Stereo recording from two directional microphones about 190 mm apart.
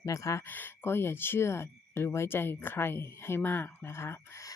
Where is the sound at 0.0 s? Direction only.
15° left (ahead or behind).